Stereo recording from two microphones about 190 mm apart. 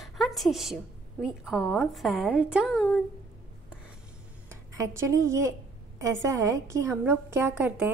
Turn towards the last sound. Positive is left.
turn(degrees=-10)  # may be behind; listen again after turning